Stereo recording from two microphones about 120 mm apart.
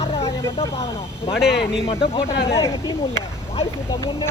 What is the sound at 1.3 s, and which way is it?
Speech, 5° right (ahead or behind).